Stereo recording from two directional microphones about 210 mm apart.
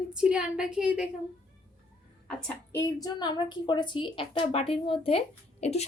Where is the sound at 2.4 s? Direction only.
15° left (ahead or behind).